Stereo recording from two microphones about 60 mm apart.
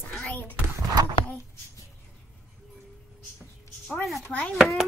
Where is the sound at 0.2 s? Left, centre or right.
Left.